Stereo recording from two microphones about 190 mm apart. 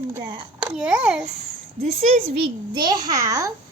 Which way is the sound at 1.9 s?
35° right (ahead or behind).